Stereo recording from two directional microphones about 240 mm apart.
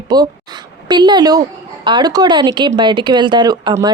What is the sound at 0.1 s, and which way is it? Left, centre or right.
A woman's voice, centre.